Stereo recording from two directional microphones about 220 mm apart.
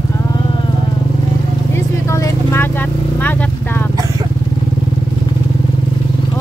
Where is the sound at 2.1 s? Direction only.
15° left (ahead or behind).